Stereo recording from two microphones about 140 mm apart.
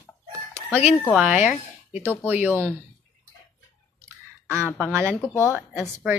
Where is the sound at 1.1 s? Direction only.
5° right (ahead or behind).